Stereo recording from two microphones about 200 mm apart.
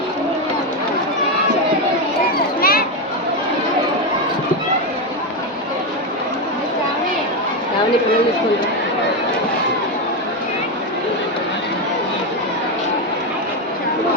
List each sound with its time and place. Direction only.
2.6 s children playing: 50° left (ahead or behind)